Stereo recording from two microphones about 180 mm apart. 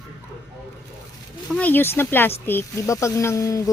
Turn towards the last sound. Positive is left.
turn(degrees=20)  # may be behind; listen again after turning